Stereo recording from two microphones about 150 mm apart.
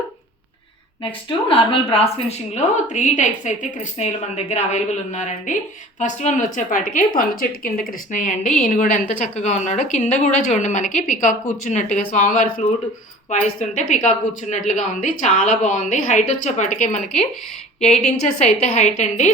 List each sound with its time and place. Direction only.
1.0 s a woman's voice: 35° left (ahead or behind)
2.8 s a woman's voice: 55° left (ahead or behind)
17.8 s a woman's voice: 5° left (ahead or behind)
18.3 s a woman's voice: 45° left (ahead or behind)